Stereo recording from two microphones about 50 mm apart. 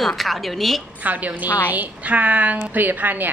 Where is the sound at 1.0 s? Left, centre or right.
Right.